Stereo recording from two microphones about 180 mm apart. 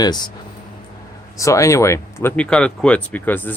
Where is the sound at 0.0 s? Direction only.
20° left (ahead or behind).